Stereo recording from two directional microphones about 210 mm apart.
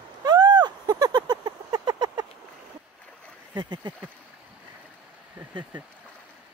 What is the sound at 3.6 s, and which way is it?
Speech, 20° right (ahead or behind).